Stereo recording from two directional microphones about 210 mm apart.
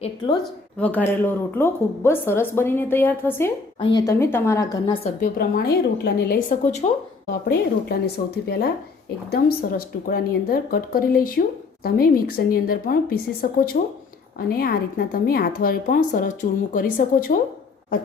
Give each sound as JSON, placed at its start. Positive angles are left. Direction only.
{"t": 0.8, "sound": "a woman's voice", "side_deg": 5}
{"t": 5.2, "sound": "a woman's voice", "side_deg": 45}
{"t": 7.4, "sound": "a woman's voice", "side_deg": 50}